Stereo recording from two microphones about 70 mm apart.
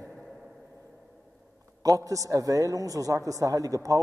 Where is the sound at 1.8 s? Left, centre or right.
Right.